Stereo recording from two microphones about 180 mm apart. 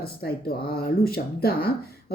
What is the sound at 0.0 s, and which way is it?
A woman's voice, 60° left (ahead or behind).